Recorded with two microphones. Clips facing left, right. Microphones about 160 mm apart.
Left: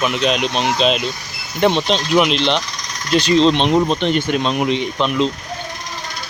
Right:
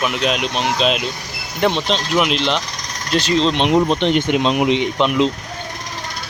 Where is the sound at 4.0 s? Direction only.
20° right (ahead or behind).